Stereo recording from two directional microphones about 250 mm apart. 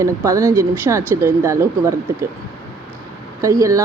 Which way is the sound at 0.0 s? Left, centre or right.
Centre.